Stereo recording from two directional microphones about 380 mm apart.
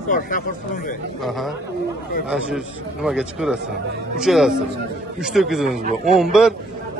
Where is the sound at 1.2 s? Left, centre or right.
Centre.